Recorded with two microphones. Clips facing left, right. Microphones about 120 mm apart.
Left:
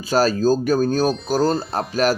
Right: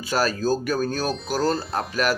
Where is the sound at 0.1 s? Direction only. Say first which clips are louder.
Left 5 dB; 30° left (ahead or behind).